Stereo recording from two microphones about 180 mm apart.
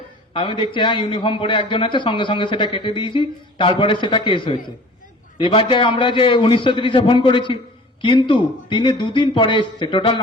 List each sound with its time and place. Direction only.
0.3 s a man's voice: 30° left (ahead or behind)